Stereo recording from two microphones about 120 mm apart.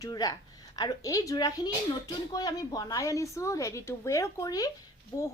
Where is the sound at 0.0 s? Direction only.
30° left (ahead or behind).